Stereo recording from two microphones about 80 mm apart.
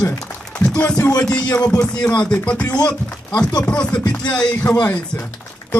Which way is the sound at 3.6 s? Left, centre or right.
Centre.